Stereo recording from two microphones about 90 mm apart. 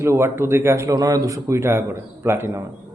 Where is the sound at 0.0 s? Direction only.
30° right (ahead or behind).